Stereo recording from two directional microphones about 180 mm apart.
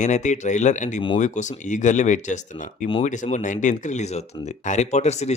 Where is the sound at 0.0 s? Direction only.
40° left (ahead or behind).